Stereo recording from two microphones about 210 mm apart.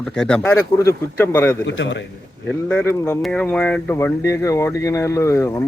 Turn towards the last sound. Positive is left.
turn(degrees=10)  # may be behind; listen again after turning